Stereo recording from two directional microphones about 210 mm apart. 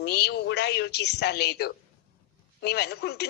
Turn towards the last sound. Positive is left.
turn(degrees=50)  # may be behind; listen again after turning